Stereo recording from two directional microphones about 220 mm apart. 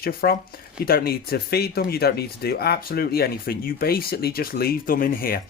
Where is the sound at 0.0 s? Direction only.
45° left (ahead or behind).